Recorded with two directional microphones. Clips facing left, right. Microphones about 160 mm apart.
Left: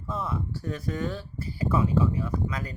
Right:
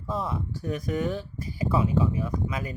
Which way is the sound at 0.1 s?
20° right (ahead or behind).